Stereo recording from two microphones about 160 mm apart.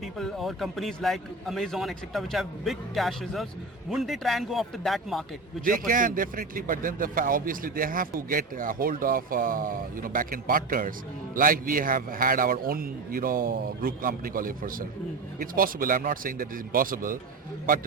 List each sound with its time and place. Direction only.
0.0 s a man's voice: centre (ahead or behind)
5.6 s a man's voice: 60° right (ahead or behind)